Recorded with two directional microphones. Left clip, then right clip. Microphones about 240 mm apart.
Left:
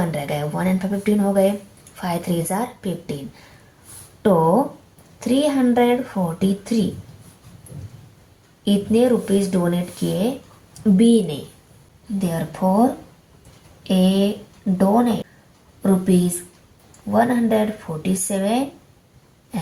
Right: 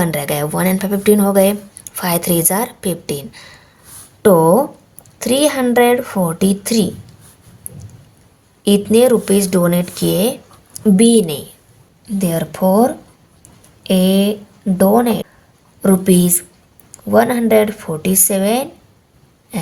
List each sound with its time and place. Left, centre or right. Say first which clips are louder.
0.0 s speech: right 6 dB; right
4.2 s speech: right 6 dB; right
8.6 s speech: right 7 dB; right